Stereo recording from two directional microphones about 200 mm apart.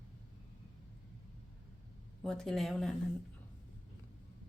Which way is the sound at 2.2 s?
Centre (ahead or behind).